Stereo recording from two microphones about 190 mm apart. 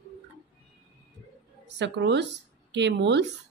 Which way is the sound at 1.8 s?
65° right (ahead or behind).